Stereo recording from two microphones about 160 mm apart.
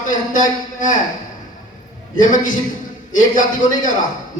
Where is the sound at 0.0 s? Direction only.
55° left (ahead or behind).